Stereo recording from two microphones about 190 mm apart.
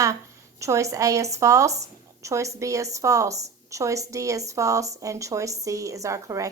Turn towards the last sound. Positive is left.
turn(degrees=-15)  # may be behind; listen again after turning